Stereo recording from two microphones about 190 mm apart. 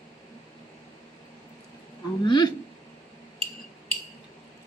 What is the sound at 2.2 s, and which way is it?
Speech, 25° left (ahead or behind).